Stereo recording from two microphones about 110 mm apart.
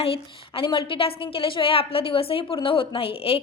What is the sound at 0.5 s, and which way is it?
A woman's voice, 50° left (ahead or behind).